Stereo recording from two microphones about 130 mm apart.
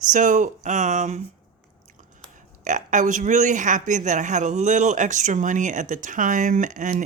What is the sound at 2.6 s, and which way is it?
A man's voice, 75° right (ahead or behind).